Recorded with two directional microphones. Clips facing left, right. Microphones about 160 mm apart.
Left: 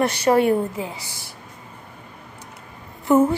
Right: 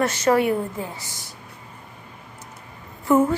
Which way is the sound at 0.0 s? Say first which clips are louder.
Left 2 dB; 15° left (ahead or behind).